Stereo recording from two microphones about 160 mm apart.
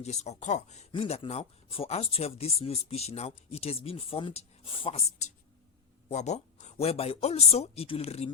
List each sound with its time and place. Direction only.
0.0 s speech: 45° left (ahead or behind)